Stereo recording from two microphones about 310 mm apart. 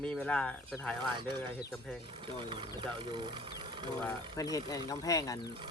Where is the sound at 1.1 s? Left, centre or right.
Centre.